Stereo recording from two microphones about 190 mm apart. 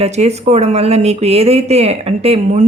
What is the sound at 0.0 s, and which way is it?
Speech, 35° right (ahead or behind).